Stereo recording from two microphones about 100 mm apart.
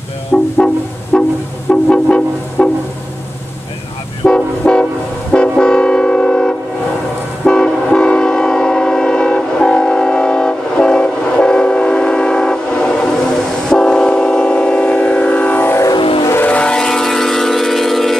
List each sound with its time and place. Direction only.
0.3 s train: 10° left (ahead or behind)
1.1 s vehicle: 5° left (ahead or behind)
1.7 s music: 10° left (ahead or behind)
4.2 s vehicle: 10° left (ahead or behind)
7.4 s train: 10° left (ahead or behind)
16.0 s vehicle: 60° left (ahead or behind)
16.4 s train: 10° left (ahead or behind)